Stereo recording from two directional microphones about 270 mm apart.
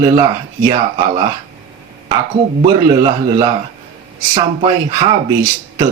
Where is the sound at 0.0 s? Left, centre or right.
Centre.